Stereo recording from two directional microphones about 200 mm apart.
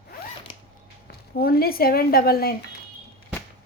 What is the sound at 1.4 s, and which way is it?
Speech, 50° left (ahead or behind).